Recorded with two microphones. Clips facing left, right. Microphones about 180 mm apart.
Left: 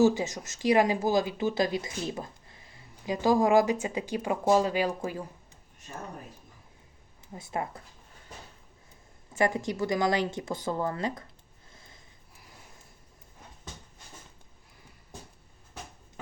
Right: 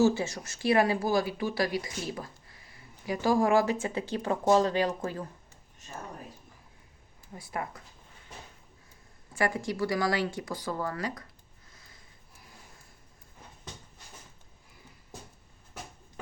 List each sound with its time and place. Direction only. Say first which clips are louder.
0.0 s speech: left 2 dB; 15° left (ahead or behind)
7.3 s speech: left 3 dB; 25° left (ahead or behind)
9.3 s speech: left 2 dB; 20° left (ahead or behind)
11.7 s a sound: left 4 dB; 25° left (ahead or behind)